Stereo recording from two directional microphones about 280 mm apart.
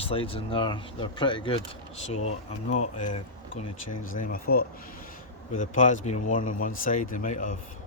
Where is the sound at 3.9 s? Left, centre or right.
Left.